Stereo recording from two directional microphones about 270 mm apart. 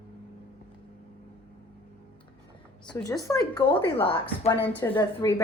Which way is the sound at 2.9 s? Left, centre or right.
Centre.